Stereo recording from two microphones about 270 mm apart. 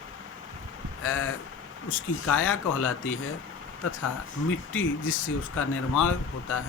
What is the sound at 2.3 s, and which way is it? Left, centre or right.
Speech, left.